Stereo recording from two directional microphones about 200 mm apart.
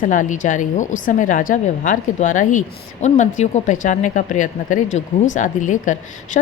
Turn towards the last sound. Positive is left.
turn(degrees=40)  # may be behind; listen again after turning